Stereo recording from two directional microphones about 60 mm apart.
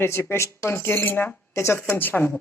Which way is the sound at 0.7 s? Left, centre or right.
Left.